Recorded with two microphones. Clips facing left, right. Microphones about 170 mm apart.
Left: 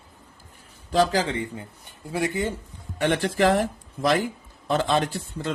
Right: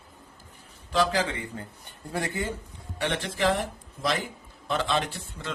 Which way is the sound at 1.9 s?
10° left (ahead or behind).